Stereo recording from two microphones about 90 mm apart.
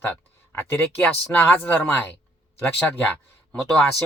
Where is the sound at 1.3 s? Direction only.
20° left (ahead or behind).